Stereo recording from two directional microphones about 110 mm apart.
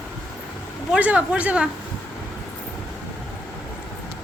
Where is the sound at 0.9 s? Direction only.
15° right (ahead or behind).